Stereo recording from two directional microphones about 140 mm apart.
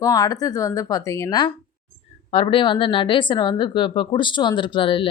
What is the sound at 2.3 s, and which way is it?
Speech, 40° left (ahead or behind).